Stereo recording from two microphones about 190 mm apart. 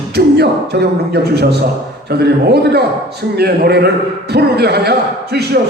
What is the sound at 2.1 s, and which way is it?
A man's voice, 55° right (ahead or behind).